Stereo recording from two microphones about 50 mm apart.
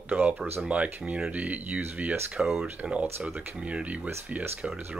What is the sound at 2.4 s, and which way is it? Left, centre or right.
Speech, centre.